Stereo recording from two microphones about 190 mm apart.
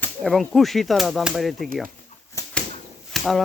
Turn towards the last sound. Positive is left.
turn(degrees=0)  # may be behind; listen again after turning